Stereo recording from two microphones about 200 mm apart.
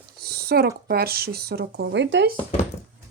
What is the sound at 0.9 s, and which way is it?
Speech, 50° right (ahead or behind).